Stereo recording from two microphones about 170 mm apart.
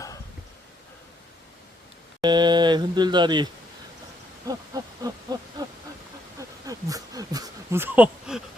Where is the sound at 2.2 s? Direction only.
25° right (ahead or behind).